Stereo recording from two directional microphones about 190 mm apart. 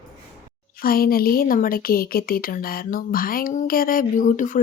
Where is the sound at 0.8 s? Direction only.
50° left (ahead or behind).